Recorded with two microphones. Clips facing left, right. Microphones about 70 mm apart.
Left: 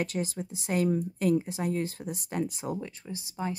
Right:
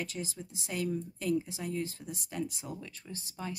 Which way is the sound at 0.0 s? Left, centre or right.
Left.